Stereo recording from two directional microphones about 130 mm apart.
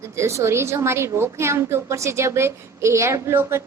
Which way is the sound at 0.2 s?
20° right (ahead or behind).